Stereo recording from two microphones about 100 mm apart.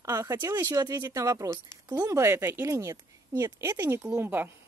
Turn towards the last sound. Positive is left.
turn(degrees=-25)  # may be behind; listen again after turning